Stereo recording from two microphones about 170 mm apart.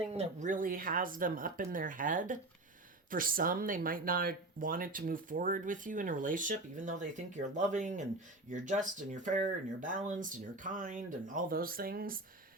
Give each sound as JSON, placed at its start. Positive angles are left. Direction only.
{"t": 0.1, "sound": "speech", "side_deg": -40}